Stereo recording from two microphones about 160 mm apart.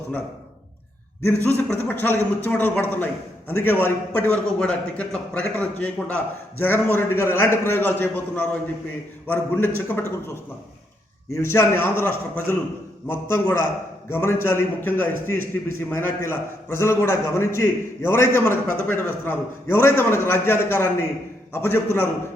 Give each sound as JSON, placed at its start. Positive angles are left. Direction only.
{"t": 1.2, "sound": "a man's voice", "side_deg": 10}
{"t": 11.3, "sound": "a man's voice", "side_deg": 15}